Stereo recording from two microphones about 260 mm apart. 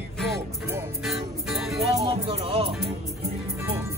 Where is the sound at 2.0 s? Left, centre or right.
Right.